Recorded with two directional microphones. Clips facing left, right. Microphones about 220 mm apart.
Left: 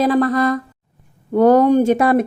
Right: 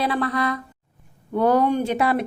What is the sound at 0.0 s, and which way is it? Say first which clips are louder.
A woman's voice: left 8 dB; 45° left (ahead or behind).